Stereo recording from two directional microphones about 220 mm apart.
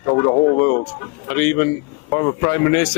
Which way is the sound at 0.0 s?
20° left (ahead or behind).